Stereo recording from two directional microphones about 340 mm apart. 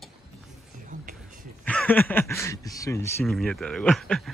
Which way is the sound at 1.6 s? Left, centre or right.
Centre.